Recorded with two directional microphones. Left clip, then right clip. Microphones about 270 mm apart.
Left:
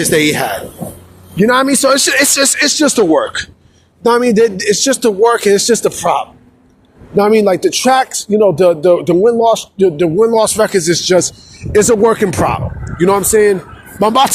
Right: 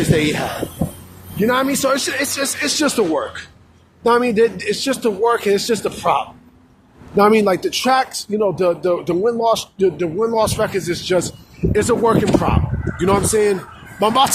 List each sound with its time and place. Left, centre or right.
0.1 s speech: left